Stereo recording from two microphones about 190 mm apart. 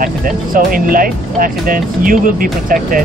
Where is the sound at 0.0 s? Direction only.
45° right (ahead or behind).